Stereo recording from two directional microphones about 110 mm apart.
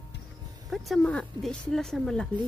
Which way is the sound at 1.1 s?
10° left (ahead or behind).